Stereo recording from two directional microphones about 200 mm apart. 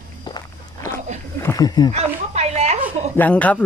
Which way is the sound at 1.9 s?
35° right (ahead or behind).